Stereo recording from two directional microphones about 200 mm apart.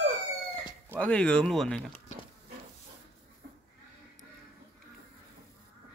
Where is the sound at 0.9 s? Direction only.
5° left (ahead or behind).